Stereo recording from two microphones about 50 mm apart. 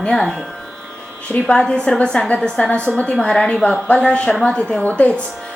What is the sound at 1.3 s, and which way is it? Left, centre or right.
A woman's voice, centre.